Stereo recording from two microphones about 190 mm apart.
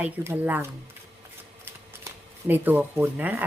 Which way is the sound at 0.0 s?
10° right (ahead or behind).